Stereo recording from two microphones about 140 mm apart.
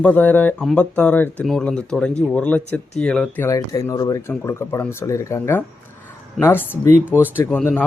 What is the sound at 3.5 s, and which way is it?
Speech, 25° left (ahead or behind).